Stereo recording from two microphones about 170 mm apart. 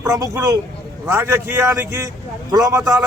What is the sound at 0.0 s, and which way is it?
A man's voice, 15° right (ahead or behind).